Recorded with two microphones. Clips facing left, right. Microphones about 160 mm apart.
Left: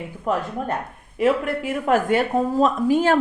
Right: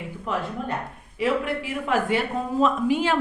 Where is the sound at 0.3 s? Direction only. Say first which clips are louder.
Left 4 dB; 45° left (ahead or behind).